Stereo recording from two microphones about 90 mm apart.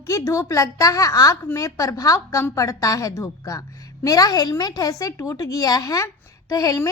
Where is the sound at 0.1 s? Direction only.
35° left (ahead or behind).